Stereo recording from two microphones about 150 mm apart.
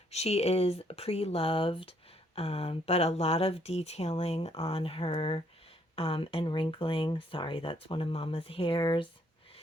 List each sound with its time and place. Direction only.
0.1 s speech: 45° left (ahead or behind)